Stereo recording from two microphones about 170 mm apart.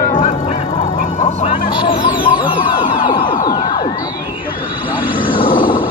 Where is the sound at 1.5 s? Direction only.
30° left (ahead or behind).